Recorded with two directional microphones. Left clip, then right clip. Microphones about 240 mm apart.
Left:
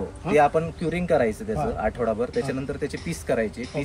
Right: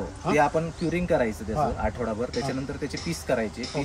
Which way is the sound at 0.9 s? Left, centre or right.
Centre.